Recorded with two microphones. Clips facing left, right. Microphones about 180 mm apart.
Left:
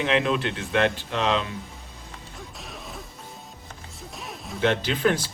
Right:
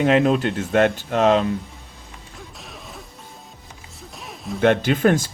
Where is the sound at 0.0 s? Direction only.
45° right (ahead or behind).